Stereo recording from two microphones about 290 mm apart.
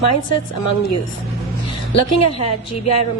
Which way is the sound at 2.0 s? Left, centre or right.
Left.